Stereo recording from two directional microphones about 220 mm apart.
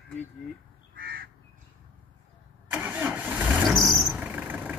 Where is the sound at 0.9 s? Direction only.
40° right (ahead or behind).